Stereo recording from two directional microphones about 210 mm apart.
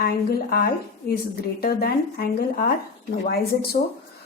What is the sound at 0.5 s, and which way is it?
A woman's voice, 45° left (ahead or behind).